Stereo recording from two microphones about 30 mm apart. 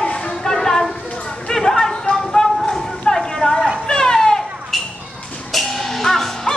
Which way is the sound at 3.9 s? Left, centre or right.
Left.